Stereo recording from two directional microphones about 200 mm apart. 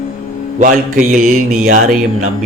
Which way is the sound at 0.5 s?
40° right (ahead or behind).